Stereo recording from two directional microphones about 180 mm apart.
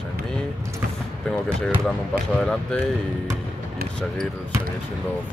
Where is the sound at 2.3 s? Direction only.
5° left (ahead or behind).